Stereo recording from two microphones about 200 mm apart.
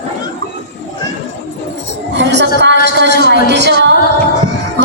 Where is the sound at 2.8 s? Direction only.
60° right (ahead or behind).